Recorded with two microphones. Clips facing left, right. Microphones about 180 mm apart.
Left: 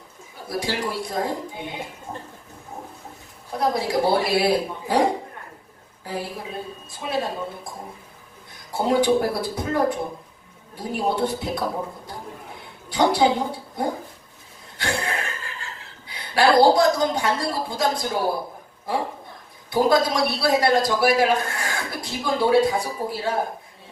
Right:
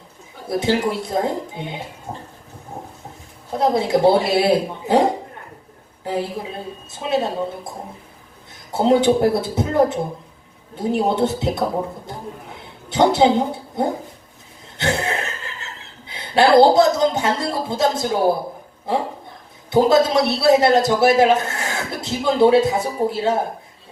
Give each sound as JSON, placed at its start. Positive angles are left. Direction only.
{"t": 0.4, "sound": "a man's voice", "side_deg": -25}
{"t": 2.1, "sound": "a sound", "side_deg": -30}
{"t": 3.5, "sound": "a man's voice", "side_deg": -25}
{"t": 7.1, "sound": "a man's voice", "side_deg": -25}
{"t": 8.7, "sound": "a man's voice", "side_deg": -25}
{"t": 12.9, "sound": "a woman's voice", "side_deg": -25}
{"t": 19.7, "sound": "a man's voice", "side_deg": -25}